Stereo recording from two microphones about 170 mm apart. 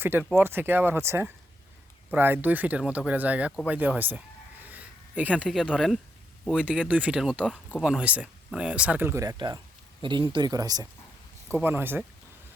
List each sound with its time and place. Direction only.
0.0 s speech: 10° right (ahead or behind)